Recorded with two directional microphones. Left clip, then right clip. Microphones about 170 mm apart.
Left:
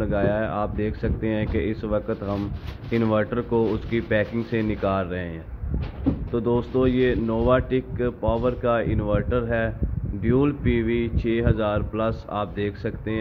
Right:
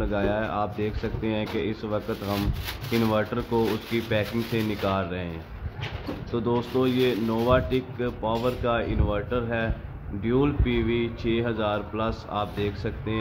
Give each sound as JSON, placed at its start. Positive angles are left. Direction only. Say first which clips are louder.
{"t": 0.0, "sound": "speech", "louder": "left 3 dB", "side_deg": 5}
{"t": 6.3, "sound": "speech", "louder": "left 2 dB", "side_deg": 5}